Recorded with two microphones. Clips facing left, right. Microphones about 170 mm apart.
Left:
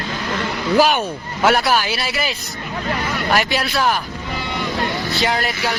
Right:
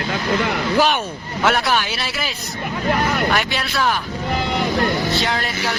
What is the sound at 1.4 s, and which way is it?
Speech, 5° left (ahead or behind).